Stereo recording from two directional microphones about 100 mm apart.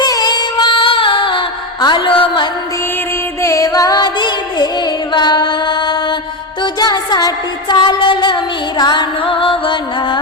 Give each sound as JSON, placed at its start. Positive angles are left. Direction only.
{"t": 0.0, "sound": "music", "side_deg": 40}
{"t": 3.4, "sound": "music", "side_deg": 35}